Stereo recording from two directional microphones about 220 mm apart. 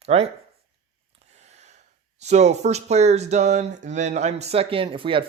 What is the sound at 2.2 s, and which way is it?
Speech, 30° right (ahead or behind).